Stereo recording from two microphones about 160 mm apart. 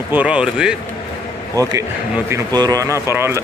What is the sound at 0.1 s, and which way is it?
Speech, 10° right (ahead or behind).